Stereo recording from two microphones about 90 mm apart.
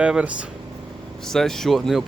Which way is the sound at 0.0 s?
15° right (ahead or behind).